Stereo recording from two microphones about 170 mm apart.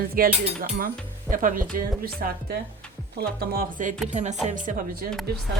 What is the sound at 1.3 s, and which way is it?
A woman's voice, 55° right (ahead or behind).